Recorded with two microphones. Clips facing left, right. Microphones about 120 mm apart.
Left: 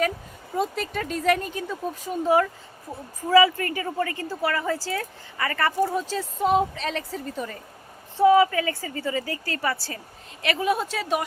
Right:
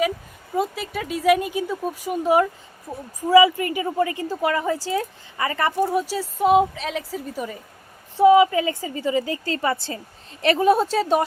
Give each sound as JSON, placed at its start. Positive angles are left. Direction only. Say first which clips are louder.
{"t": 0.5, "sound": "a woman's voice", "louder": "right 2 dB", "side_deg": -5}
{"t": 10.4, "sound": "speech", "louder": "right 7 dB", "side_deg": -35}